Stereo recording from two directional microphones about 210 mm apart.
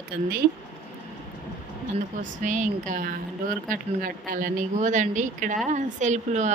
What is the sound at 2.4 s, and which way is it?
Speech, 35° right (ahead or behind).